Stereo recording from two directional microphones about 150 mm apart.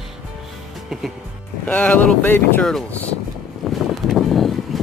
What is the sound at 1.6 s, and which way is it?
Speech, 10° left (ahead or behind).